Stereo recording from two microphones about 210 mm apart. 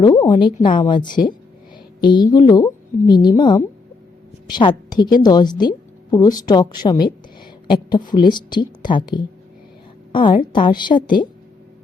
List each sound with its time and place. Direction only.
0.0 s a woman's voice: 20° left (ahead or behind)